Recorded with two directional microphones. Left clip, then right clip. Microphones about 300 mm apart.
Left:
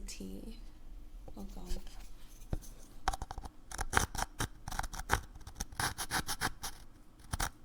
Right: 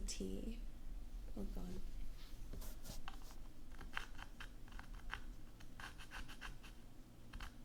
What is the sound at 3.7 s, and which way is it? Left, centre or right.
Scissors, left.